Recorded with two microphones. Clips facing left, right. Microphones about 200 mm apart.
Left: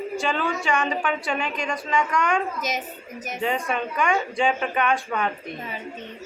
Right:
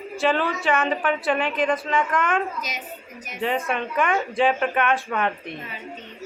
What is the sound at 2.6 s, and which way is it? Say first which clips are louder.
Speech: left 5 dB; 45° left (ahead or behind).